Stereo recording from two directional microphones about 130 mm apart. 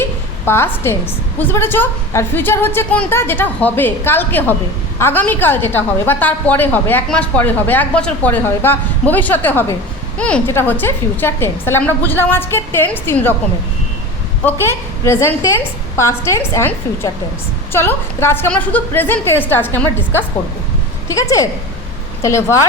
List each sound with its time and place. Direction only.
0.0 s a woman's voice: 20° left (ahead or behind)
14.4 s a woman's voice: 20° left (ahead or behind)